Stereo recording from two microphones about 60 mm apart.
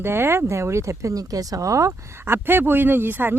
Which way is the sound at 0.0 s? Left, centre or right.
Right.